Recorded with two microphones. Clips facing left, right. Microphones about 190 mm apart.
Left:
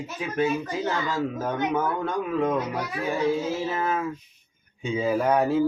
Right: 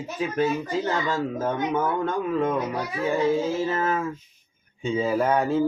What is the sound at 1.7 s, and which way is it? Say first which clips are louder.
Speech: right 1 dB; 5° left (ahead or behind).